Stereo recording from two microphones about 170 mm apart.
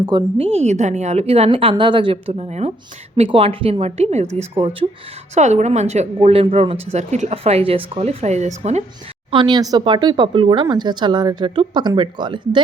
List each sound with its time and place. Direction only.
0.0 s speech: 25° right (ahead or behind)
0.3 s speech: 35° right (ahead or behind)
5.3 s speech: 45° right (ahead or behind)
9.3 s speech: 25° right (ahead or behind)